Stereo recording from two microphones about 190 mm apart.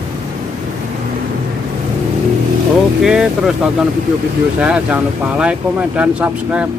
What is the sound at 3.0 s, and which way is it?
Speech, 5° right (ahead or behind).